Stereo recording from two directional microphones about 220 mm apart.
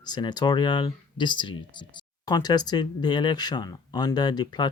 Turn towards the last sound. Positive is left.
turn(degrees=20)  # may be behind; listen again after turning